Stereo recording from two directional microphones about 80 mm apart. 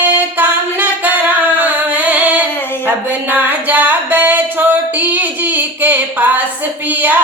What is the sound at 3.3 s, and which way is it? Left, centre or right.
Music, right.